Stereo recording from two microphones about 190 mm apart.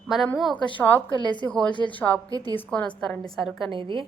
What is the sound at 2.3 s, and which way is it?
Speech, 20° right (ahead or behind).